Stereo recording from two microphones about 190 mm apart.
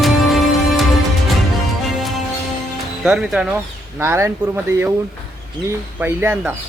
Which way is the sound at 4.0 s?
15° right (ahead or behind).